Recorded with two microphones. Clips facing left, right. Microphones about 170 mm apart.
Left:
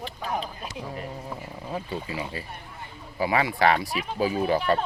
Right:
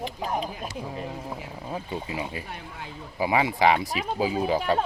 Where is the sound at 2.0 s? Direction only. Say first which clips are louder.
Right 1 dB; 20° right (ahead or behind).